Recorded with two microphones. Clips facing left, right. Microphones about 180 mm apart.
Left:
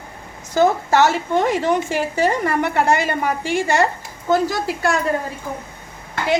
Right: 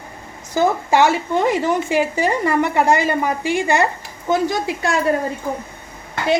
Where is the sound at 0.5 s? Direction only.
10° right (ahead or behind).